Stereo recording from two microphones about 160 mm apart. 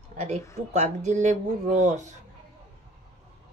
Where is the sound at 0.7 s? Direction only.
45° right (ahead or behind).